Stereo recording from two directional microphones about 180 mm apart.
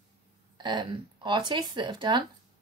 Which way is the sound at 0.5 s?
25° right (ahead or behind).